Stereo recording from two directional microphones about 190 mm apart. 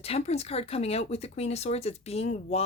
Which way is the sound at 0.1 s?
35° left (ahead or behind).